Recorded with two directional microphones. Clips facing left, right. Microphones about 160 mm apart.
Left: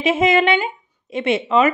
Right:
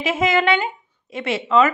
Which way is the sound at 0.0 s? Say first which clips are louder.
Left 3 dB; 25° left (ahead or behind).